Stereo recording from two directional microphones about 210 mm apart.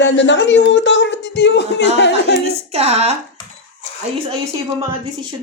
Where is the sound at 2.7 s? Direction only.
30° right (ahead or behind).